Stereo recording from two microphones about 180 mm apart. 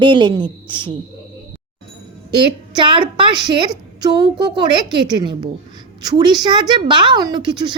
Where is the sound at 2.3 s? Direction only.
25° right (ahead or behind).